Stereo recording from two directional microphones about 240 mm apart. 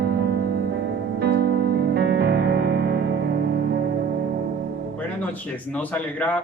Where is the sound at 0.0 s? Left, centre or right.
Right.